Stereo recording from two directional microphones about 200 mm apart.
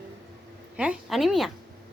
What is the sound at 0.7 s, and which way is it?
Speech, 5° right (ahead or behind).